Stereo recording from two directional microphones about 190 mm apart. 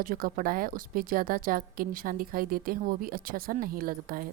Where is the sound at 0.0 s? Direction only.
50° right (ahead or behind).